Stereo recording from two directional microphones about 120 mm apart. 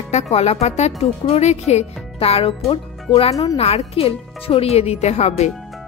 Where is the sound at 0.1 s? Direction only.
60° left (ahead or behind).